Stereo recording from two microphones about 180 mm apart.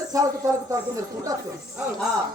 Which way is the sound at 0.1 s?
20° right (ahead or behind).